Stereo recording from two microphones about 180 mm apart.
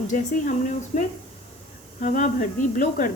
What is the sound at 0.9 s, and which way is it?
Speech, 45° left (ahead or behind).